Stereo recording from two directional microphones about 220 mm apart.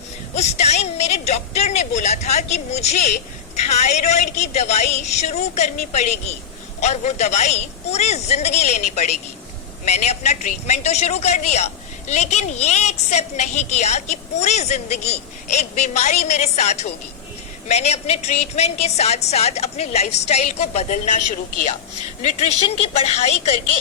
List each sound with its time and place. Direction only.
0.3 s a man's voice: 30° left (ahead or behind)